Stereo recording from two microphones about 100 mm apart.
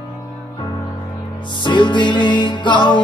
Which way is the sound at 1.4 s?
50° left (ahead or behind).